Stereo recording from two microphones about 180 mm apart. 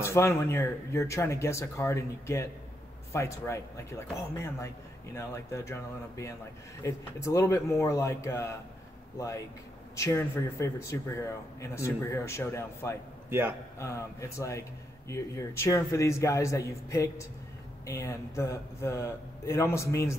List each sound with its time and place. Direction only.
0.0 s a man's voice: 15° left (ahead or behind)
5.1 s a man's voice: 15° left (ahead or behind)
9.9 s a man's voice: 15° left (ahead or behind)
13.3 s a man's voice: 15° right (ahead or behind)
13.7 s a man's voice: 15° left (ahead or behind)